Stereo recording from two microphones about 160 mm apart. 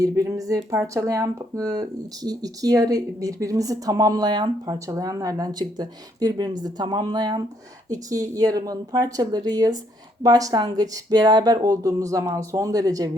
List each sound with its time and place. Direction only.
0.0 s speech: 20° right (ahead or behind)